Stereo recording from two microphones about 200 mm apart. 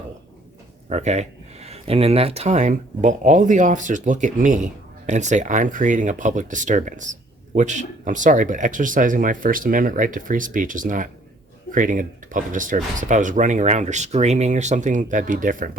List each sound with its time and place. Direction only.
0.9 s speech: 35° right (ahead or behind)